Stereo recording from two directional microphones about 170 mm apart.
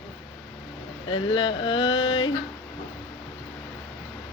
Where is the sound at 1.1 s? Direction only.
30° left (ahead or behind).